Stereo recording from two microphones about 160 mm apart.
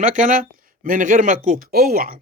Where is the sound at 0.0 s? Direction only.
55° right (ahead or behind).